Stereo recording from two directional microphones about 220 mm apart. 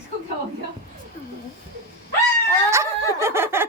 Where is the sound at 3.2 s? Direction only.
10° right (ahead or behind).